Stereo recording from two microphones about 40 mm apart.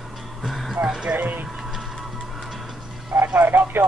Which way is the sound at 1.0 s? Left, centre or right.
Right.